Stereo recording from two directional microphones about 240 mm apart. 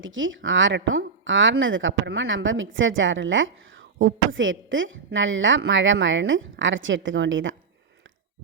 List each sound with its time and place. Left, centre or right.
0.0 s speech: right